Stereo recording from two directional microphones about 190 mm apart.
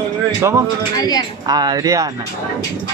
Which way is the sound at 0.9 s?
20° left (ahead or behind).